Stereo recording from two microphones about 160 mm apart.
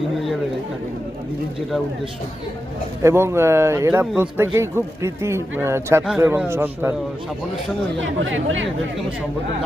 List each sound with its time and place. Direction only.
3.0 s a man's voice: 15° right (ahead or behind)